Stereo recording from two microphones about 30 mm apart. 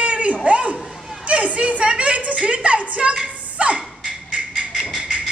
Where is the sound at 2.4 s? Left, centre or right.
Right.